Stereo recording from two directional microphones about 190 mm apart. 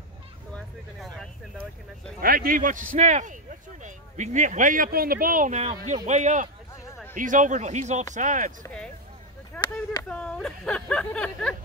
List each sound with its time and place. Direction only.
0.5 s vehicle: centre (ahead or behind)
2.1 s speech: 50° right (ahead or behind)
9.5 s chop: 5° left (ahead or behind)
10.0 s speech: 5° left (ahead or behind)